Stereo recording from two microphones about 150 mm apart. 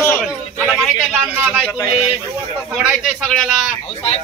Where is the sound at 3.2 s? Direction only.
5° left (ahead or behind).